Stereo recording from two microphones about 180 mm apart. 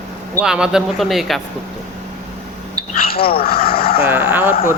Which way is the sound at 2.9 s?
55° left (ahead or behind).